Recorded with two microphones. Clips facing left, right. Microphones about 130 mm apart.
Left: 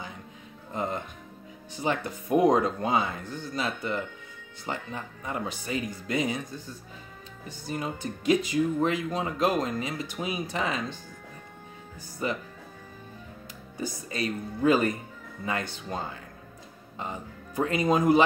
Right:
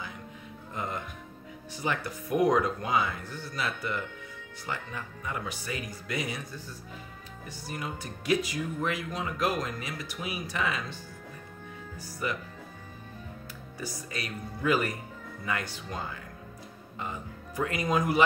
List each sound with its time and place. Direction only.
0.7 s speech: 25° left (ahead or behind)
7.4 s speech: 25° left (ahead or behind)
12.2 s speech: 30° left (ahead or behind)
13.7 s speech: 25° left (ahead or behind)